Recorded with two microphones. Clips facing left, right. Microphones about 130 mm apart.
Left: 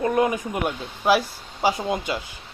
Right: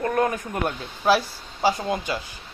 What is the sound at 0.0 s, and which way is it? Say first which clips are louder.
Speech: left 2 dB; 15° left (ahead or behind).